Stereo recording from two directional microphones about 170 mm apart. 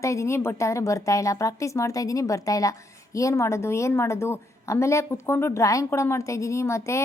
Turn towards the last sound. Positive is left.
turn(degrees=15)  # may be behind; listen again after turning